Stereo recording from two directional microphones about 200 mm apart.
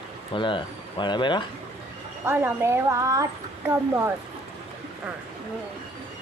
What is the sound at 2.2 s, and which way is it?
Speech, 10° right (ahead or behind).